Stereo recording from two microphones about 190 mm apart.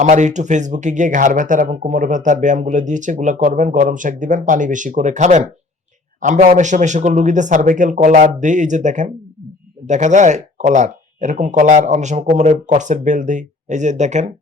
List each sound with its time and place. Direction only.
0.0 s speech: 40° right (ahead or behind)